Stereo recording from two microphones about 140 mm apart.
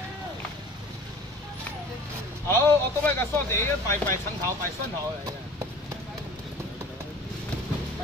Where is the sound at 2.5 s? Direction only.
20° left (ahead or behind).